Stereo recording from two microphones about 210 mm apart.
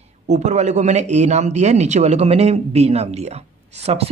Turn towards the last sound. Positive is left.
turn(degrees=-30)  # may be behind; listen again after turning